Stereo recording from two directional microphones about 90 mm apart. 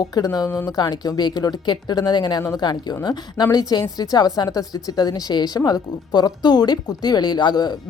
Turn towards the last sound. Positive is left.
turn(degrees=50)  # may be behind; listen again after turning